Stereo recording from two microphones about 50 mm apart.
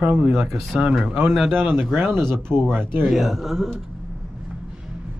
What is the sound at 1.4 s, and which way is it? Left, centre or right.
Speech, right.